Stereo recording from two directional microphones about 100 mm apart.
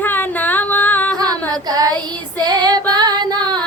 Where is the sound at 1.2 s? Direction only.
40° right (ahead or behind).